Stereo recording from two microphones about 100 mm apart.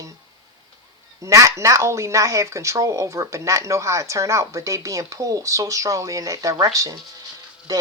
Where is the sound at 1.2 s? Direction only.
30° right (ahead or behind).